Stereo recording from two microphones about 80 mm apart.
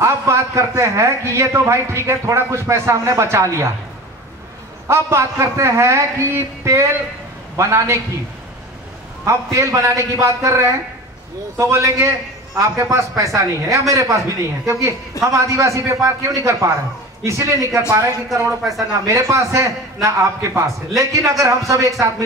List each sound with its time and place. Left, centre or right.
0.0 s a man's voice: right
4.8 s a man's voice: right
9.2 s a man's voice: right